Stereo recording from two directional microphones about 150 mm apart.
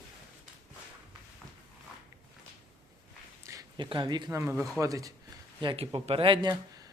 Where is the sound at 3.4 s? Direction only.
20° right (ahead or behind).